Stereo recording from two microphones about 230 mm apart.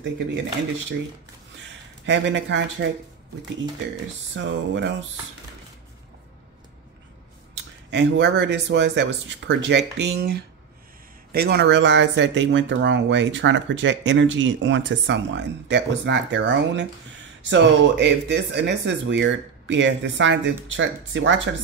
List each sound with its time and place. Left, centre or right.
2.0 s speech: right
4.4 s speech: right
7.5 s speech: right